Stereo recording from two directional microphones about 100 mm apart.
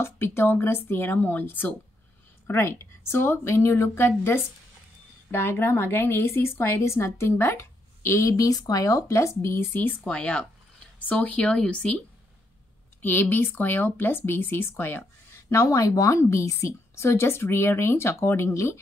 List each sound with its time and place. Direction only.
0.0 s a woman's voice: 25° left (ahead or behind)
5.3 s a woman's voice: 25° left (ahead or behind)
10.0 s speech: 10° left (ahead or behind)
13.0 s a woman's voice: 20° left (ahead or behind)
15.5 s a woman's voice: 35° left (ahead or behind)